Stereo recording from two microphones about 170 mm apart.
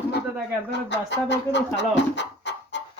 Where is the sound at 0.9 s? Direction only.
90° left.